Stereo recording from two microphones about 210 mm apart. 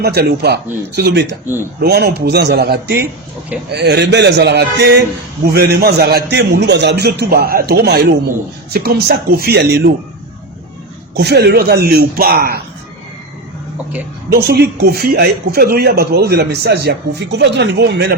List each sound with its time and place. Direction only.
0.0 s speech: 50° right (ahead or behind)
11.1 s speech: 50° right (ahead or behind)
14.3 s speech: 50° right (ahead or behind)